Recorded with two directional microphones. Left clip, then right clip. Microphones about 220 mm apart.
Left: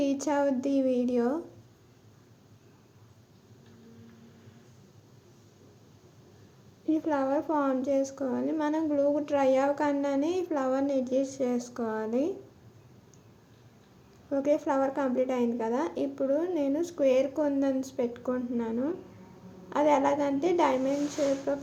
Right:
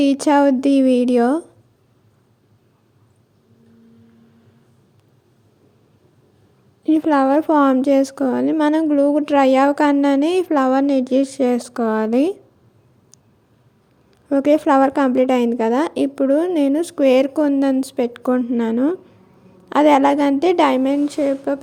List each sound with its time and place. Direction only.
0.0 s a woman's voice: 45° right (ahead or behind)
6.8 s a woman's voice: 45° right (ahead or behind)
14.3 s a woman's voice: 45° right (ahead or behind)